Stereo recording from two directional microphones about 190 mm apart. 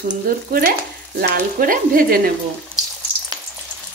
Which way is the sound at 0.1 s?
50° right (ahead or behind).